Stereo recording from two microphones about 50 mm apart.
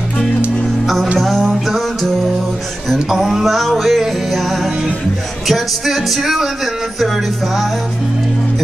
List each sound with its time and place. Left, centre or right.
1.2 s music: centre
5.5 s speech: centre